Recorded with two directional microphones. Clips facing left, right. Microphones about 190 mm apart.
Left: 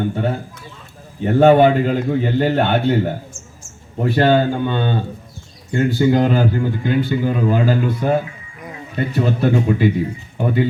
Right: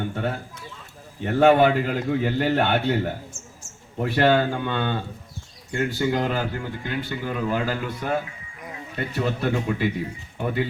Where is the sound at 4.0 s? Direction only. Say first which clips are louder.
Left 5 dB; 30° left (ahead or behind).